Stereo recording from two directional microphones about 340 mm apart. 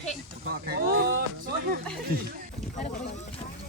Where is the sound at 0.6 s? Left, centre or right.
Right.